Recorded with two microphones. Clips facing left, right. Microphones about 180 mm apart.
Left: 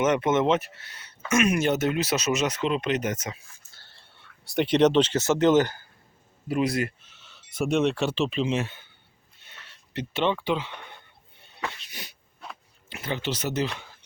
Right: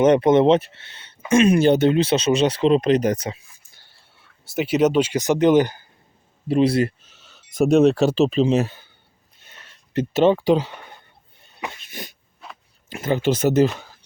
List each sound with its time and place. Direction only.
0.0 s speech: 35° right (ahead or behind)
3.5 s a sound: 15° right (ahead or behind)
6.5 s speech: 30° right (ahead or behind)
9.9 s speech: 45° right (ahead or behind)
11.8 s dog: 50° right (ahead or behind)
12.4 s a sound: centre (ahead or behind)
12.9 s speech: 45° right (ahead or behind)